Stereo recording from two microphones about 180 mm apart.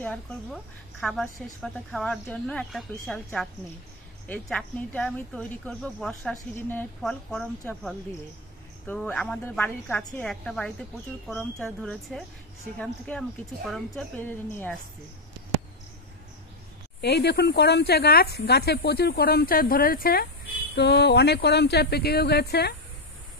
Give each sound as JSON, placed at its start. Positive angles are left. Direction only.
{"t": 0.0, "sound": "a woman's voice", "side_deg": 5}
{"t": 17.0, "sound": "speech", "side_deg": 65}
{"t": 20.7, "sound": "speech", "side_deg": 65}